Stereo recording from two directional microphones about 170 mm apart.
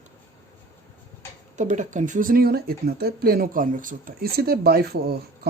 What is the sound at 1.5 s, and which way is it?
Speech, 45° right (ahead or behind).